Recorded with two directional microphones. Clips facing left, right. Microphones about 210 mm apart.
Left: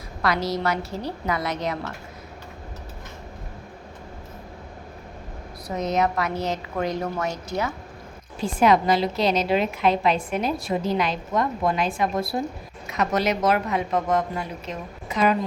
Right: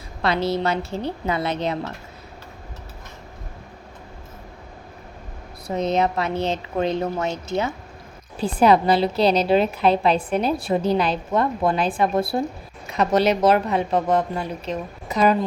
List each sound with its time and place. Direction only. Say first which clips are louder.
0.2 s a woman's voice: right 3 dB; 25° right (ahead or behind)
5.6 s a woman's voice: right 2 dB; 30° right (ahead or behind)